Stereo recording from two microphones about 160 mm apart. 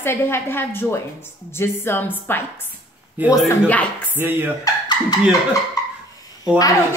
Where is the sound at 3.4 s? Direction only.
10° left (ahead or behind).